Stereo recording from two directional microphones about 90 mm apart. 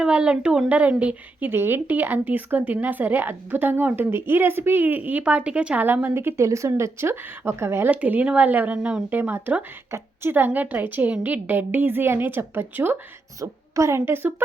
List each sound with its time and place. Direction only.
0.0 s speech: 10° right (ahead or behind)
13.4 s speech: 35° right (ahead or behind)